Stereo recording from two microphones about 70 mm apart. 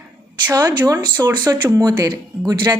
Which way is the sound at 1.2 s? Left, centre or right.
Right.